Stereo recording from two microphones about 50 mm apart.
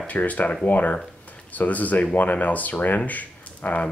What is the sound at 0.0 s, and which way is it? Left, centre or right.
Speech, left.